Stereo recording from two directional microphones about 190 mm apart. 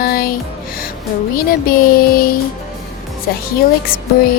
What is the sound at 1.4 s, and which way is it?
Speech, 50° left (ahead or behind).